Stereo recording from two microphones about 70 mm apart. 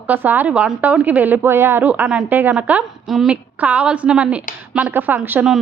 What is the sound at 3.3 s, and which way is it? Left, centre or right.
A woman's voice, right.